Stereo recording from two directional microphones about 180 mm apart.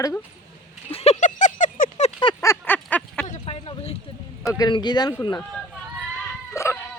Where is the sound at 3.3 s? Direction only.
35° left (ahead or behind).